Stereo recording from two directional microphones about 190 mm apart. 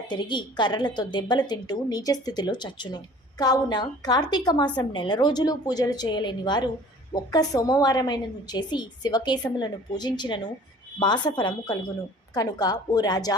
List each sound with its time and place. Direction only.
0.1 s a woman's voice: 25° left (ahead or behind)